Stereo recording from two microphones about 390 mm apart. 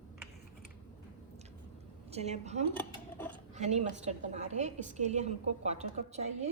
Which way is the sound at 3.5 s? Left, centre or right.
Centre.